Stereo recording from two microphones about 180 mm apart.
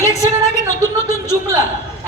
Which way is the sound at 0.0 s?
15° left (ahead or behind).